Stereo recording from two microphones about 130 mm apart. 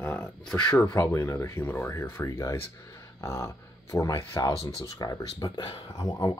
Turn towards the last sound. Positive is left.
turn(degrees=30)  # may be behind; listen again after turning